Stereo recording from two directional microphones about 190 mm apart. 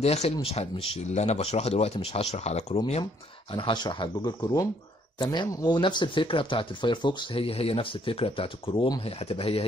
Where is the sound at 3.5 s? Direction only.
25° left (ahead or behind).